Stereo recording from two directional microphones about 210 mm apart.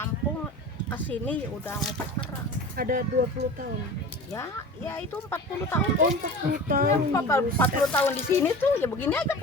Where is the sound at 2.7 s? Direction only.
45° right (ahead or behind).